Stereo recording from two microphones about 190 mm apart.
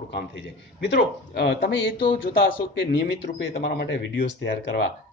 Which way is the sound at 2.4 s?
75° left (ahead or behind).